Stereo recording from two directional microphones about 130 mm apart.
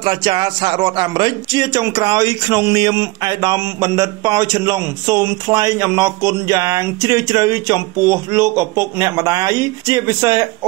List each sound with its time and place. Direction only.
0.0 s speech: 35° right (ahead or behind)